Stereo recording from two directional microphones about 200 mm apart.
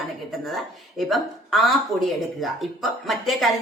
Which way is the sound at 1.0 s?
Centre (ahead or behind).